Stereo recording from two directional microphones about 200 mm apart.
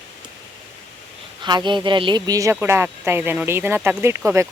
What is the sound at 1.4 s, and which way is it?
Speech, 20° right (ahead or behind).